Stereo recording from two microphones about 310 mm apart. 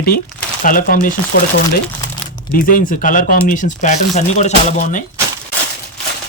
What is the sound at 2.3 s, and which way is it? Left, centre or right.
Speech, left.